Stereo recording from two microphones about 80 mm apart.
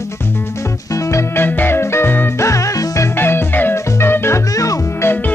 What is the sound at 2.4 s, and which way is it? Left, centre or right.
Music, left.